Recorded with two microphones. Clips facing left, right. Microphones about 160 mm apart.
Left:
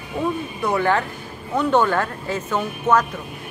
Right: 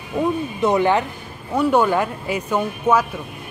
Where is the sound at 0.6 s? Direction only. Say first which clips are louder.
Right 3 dB; 20° right (ahead or behind).